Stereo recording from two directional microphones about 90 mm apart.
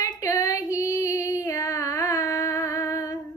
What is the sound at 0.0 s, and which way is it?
Female singing, 40° left (ahead or behind).